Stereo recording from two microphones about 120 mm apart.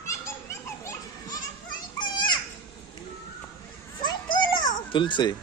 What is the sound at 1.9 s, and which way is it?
Children playing, 40° left (ahead or behind).